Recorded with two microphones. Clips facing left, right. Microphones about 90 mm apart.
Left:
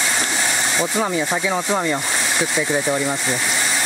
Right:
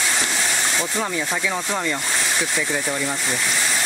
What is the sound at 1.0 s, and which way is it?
Speech, 20° left (ahead or behind).